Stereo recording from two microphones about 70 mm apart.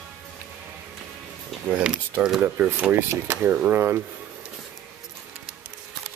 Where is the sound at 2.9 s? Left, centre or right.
Right.